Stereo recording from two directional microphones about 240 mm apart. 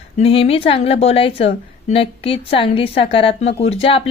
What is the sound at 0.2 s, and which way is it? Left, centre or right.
A woman's voice, left.